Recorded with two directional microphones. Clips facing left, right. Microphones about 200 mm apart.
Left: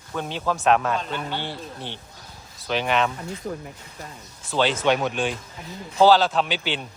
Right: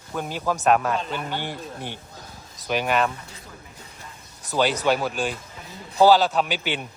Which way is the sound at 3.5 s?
55° left (ahead or behind).